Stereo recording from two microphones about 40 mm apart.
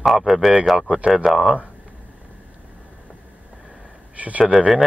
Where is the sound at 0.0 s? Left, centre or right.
Centre.